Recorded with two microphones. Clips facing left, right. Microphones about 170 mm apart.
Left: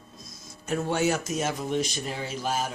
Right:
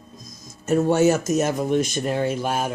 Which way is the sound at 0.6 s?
45° right (ahead or behind).